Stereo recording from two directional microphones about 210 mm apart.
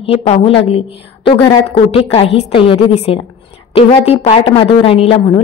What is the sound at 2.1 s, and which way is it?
A woman's voice, 25° left (ahead or behind).